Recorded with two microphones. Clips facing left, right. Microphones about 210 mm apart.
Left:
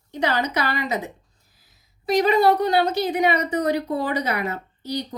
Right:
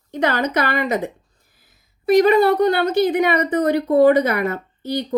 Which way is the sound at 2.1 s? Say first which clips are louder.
Right 4 dB; 55° right (ahead or behind).